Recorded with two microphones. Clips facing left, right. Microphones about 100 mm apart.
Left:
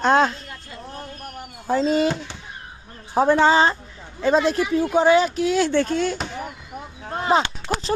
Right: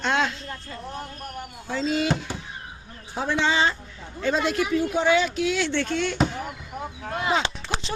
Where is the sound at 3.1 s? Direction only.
45° left (ahead or behind).